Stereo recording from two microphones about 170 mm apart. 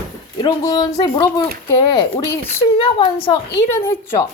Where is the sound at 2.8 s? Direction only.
30° left (ahead or behind).